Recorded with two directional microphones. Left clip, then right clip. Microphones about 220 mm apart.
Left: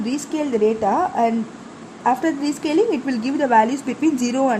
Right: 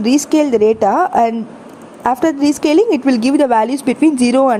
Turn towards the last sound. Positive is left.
turn(degrees=-30)  # may be behind; listen again after turning